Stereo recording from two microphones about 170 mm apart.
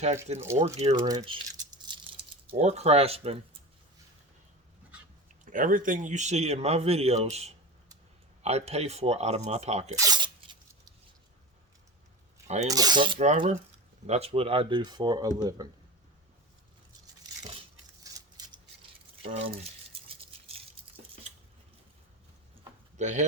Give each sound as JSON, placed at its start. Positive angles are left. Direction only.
{"t": 0.3, "sound": "speech", "side_deg": -15}
{"t": 0.6, "sound": "speech", "side_deg": -40}
{"t": 1.0, "sound": "speech", "side_deg": -25}
{"t": 2.5, "sound": "speech", "side_deg": -40}
{"t": 5.5, "sound": "speech", "side_deg": -50}
{"t": 9.9, "sound": "a sound", "side_deg": -20}
{"t": 12.6, "sound": "speech", "side_deg": -20}
{"t": 13.1, "sound": "speech", "side_deg": -45}
{"t": 14.1, "sound": "speech", "side_deg": -35}
{"t": 17.4, "sound": "a sound", "side_deg": -30}
{"t": 18.0, "sound": "a sound", "side_deg": -20}
{"t": 19.2, "sound": "a sound", "side_deg": -35}
{"t": 23.0, "sound": "speech", "side_deg": -45}